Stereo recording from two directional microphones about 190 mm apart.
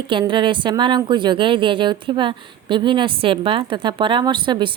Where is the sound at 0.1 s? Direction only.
25° right (ahead or behind).